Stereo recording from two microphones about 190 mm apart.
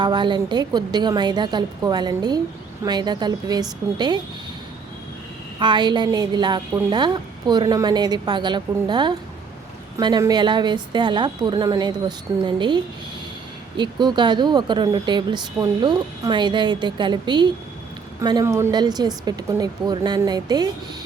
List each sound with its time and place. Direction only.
0.0 s a woman's voice: 25° right (ahead or behind)
5.5 s a woman's voice: 25° right (ahead or behind)